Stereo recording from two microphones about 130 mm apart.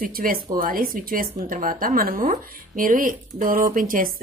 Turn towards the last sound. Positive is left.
turn(degrees=-90)